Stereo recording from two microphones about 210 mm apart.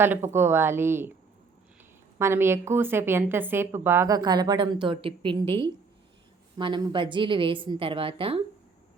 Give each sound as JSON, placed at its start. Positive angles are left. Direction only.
{"t": 0.0, "sound": "a woman's voice", "side_deg": -10}
{"t": 2.1, "sound": "a woman's voice", "side_deg": -10}